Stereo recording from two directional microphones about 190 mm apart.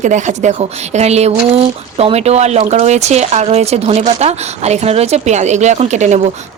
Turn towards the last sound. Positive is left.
turn(degrees=-40)  # may be behind; listen again after turning